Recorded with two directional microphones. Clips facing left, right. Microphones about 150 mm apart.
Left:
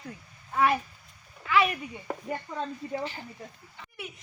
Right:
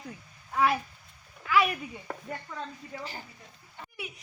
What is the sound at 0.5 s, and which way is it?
Speech, centre (ahead or behind).